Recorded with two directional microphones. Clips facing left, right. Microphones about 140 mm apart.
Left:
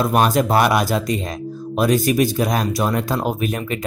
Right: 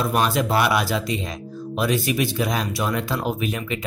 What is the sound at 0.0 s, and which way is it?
Speech, 45° left (ahead or behind).